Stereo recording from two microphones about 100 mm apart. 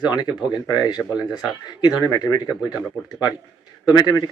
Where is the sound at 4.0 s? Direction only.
45° left (ahead or behind).